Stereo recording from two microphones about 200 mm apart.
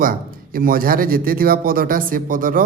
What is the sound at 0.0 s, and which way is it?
A man's voice, 45° right (ahead or behind).